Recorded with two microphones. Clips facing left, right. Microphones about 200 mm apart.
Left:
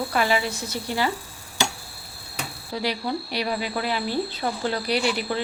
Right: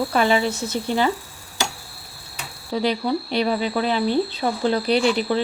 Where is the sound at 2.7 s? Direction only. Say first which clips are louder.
Right 5 dB; 25° right (ahead or behind).